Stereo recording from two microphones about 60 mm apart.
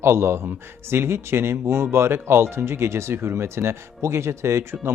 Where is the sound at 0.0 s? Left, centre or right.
Right.